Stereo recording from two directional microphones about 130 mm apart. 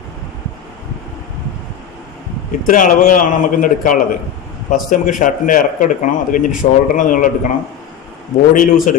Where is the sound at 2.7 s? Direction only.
85° left.